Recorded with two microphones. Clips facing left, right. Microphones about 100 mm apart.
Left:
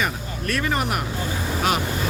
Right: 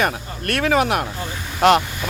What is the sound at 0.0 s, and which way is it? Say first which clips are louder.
Speech: right 4 dB; 65° right (ahead or behind).